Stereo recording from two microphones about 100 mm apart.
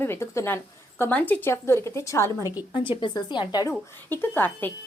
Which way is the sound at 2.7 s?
55° left (ahead or behind).